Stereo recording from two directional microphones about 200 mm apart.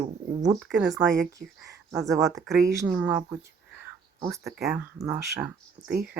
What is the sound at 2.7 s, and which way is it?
Speech, 15° right (ahead or behind).